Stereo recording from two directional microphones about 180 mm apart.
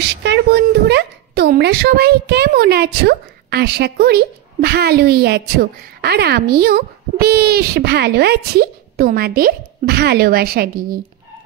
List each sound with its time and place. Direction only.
0.0 s a woman's voice: 70° right (ahead or behind); by 11.0 s 55° right (ahead or behind)